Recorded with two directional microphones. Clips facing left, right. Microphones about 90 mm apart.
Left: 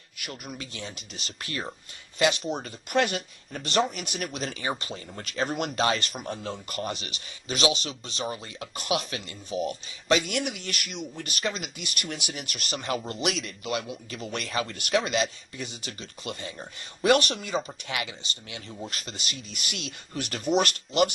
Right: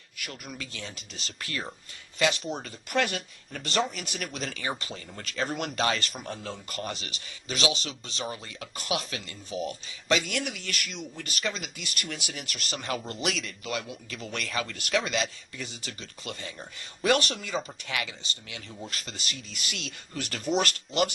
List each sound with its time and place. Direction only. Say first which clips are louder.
0.3 s speech: left 2 dB; 20° left (ahead or behind)
4.4 s speech: left 2 dB; 35° left (ahead or behind)
5.2 s speech: left 2 dB; 20° left (ahead or behind)
17.2 s speech: left 3 dB; 20° left (ahead or behind)